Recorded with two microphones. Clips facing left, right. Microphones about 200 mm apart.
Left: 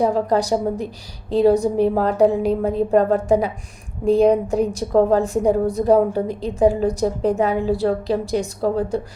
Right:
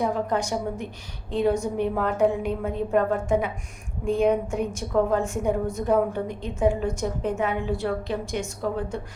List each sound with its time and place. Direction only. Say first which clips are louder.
0.0 s a woman's voice: left 7 dB; 35° left (ahead or behind)